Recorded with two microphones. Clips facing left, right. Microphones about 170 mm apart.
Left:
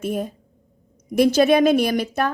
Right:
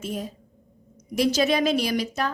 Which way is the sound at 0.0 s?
55° left (ahead or behind).